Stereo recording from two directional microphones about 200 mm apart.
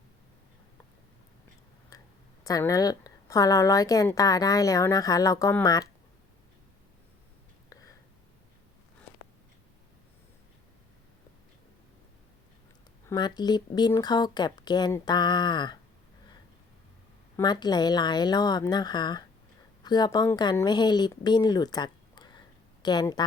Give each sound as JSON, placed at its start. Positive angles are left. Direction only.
{"t": 2.4, "sound": "a woman's voice", "side_deg": 15}
{"t": 7.7, "sound": "a sound", "side_deg": 15}
{"t": 13.1, "sound": "speech", "side_deg": 20}
{"t": 17.3, "sound": "a woman's voice", "side_deg": 20}